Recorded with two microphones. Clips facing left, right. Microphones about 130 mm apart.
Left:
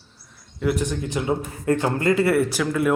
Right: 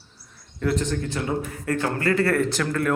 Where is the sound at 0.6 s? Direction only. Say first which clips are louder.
Left 1 dB; 10° left (ahead or behind).